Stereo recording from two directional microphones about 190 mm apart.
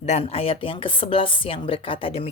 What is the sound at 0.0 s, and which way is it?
Speech, 35° left (ahead or behind).